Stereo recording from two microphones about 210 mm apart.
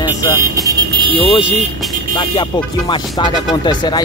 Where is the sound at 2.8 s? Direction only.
20° left (ahead or behind).